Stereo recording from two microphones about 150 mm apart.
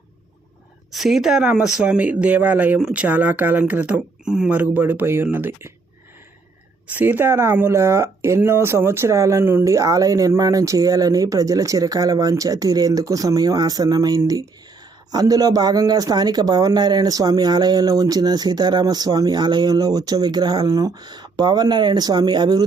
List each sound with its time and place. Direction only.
0.9 s speech: centre (ahead or behind)
6.8 s speech: 15° right (ahead or behind); by 22.6 s 30° right (ahead or behind)